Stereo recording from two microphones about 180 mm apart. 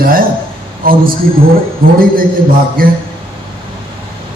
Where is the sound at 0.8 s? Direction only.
55° right (ahead or behind).